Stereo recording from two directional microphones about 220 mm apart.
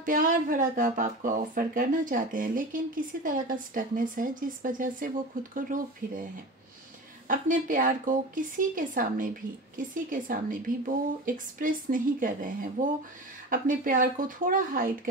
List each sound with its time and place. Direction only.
0.0 s speech: 40° right (ahead or behind)
7.2 s speech: 35° right (ahead or behind)